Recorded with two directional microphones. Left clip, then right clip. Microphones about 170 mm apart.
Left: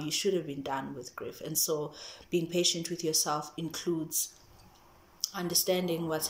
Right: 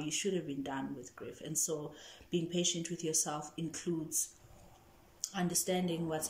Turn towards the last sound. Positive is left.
turn(degrees=-15)  # may be behind; listen again after turning